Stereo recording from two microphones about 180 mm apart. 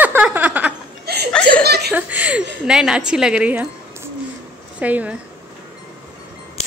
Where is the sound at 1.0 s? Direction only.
60° right (ahead or behind).